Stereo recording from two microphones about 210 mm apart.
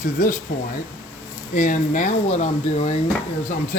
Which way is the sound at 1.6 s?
35° left (ahead or behind).